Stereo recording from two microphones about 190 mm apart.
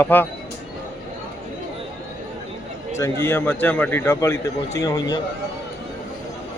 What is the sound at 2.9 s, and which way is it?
A man's voice, 15° left (ahead or behind).